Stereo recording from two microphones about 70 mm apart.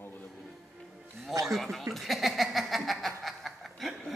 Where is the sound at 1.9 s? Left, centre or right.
Centre.